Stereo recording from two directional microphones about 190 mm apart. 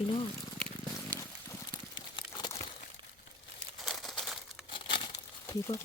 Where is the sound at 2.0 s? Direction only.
20° left (ahead or behind).